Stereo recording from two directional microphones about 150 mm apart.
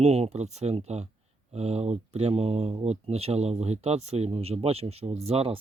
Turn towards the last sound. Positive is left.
turn(degrees=-40)  # may be behind; listen again after turning